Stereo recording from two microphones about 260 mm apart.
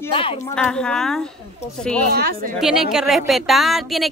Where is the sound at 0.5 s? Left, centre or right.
Centre.